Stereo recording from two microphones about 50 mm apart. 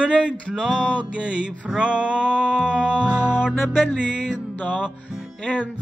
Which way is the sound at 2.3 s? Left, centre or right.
Left.